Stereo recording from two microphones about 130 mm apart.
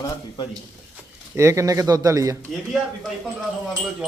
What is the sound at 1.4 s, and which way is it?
Speech, 25° right (ahead or behind).